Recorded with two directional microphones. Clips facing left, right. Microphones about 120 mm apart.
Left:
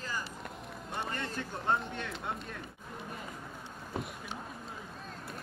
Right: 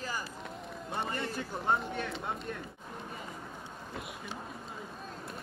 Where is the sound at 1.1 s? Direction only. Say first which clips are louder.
Right 2 dB; 10° right (ahead or behind).